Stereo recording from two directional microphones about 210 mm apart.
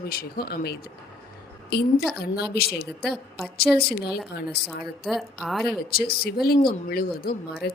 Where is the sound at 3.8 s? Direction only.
50° left (ahead or behind).